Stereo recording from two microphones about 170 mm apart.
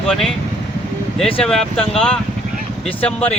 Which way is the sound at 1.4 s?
Centre (ahead or behind).